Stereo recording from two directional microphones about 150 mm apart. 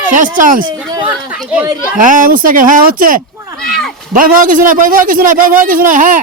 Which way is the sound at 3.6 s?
5° left (ahead or behind).